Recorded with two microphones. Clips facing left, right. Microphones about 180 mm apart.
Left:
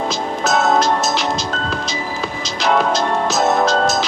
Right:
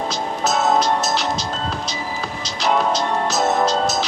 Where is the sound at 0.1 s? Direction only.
90° left.